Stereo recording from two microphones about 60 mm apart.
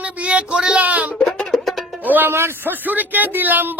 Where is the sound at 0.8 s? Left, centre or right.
Right.